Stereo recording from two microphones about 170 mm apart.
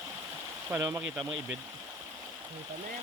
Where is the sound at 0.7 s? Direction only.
15° right (ahead or behind).